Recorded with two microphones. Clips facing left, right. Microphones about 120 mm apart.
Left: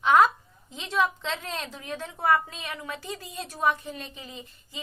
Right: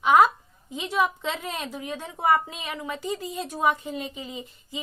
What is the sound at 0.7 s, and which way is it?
Speech, 15° right (ahead or behind).